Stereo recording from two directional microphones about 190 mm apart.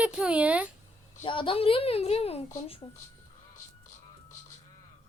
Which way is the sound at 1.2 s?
25° left (ahead or behind).